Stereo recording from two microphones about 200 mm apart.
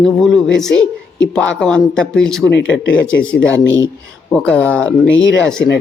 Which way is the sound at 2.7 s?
70° left (ahead or behind).